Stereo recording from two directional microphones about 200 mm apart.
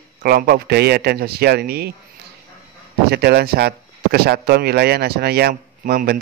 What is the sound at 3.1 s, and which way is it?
Speech, 55° right (ahead or behind).